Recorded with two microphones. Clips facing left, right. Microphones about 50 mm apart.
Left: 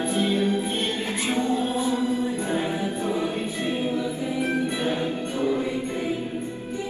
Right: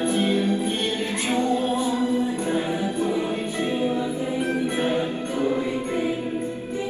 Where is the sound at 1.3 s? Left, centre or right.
Right.